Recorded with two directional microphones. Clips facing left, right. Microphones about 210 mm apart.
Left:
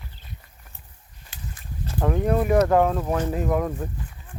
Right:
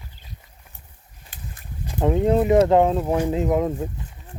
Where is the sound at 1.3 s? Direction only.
50° right (ahead or behind).